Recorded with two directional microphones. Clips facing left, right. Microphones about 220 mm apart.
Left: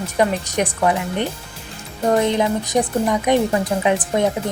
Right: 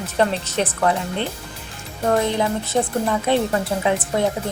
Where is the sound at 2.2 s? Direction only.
20° left (ahead or behind).